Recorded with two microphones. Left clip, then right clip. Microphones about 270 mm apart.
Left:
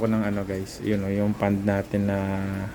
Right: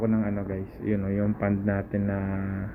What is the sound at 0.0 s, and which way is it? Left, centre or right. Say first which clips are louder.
Speech: left 2 dB; left.